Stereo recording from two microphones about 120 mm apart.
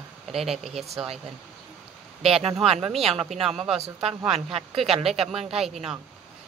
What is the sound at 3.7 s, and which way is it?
Speech, 60° right (ahead or behind).